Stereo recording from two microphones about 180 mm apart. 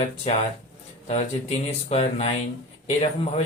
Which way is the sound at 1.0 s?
35° left (ahead or behind).